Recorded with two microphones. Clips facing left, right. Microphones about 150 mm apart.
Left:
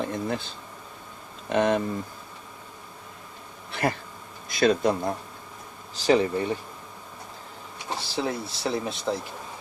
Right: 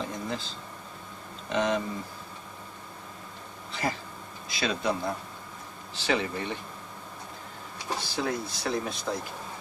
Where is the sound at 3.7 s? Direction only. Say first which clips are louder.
Left 5 dB; 60° left (ahead or behind).